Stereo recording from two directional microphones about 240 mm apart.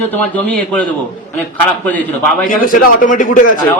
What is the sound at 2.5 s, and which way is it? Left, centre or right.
Speech, left.